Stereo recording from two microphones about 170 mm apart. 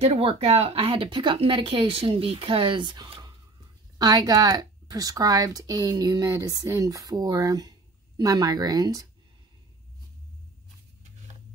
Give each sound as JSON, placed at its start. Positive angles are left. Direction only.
{"t": 0.0, "sound": "speech", "side_deg": -35}